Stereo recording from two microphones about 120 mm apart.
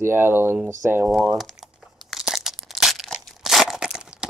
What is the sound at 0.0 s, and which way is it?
Speech, 20° right (ahead or behind).